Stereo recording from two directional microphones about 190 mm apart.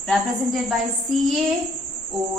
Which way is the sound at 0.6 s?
Centre (ahead or behind).